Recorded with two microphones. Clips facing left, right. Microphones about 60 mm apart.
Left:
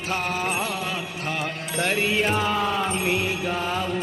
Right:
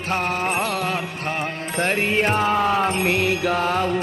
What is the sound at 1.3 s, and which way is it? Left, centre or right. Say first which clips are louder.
Music: right 2 dB; right.